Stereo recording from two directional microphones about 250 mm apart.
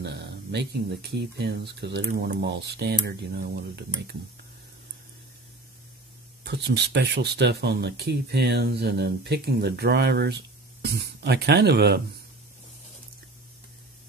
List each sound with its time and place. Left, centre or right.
0.0 s speech: right
6.4 s speech: right